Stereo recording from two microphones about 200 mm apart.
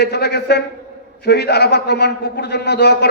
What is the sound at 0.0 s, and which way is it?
A man's voice, 55° left (ahead or behind).